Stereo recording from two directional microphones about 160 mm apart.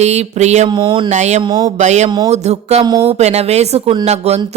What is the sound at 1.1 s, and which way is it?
Speech, 45° right (ahead or behind).